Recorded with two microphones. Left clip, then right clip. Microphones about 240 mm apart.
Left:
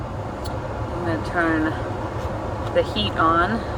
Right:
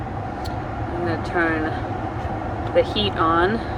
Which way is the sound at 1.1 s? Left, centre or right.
Right.